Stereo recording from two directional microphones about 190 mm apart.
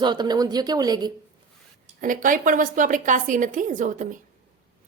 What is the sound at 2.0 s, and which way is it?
A woman's voice, 45° right (ahead or behind).